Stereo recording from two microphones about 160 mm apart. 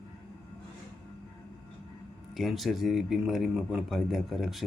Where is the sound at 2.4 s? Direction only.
Centre (ahead or behind).